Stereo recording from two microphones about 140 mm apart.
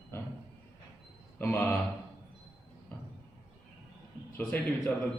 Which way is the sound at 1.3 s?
15° left (ahead or behind).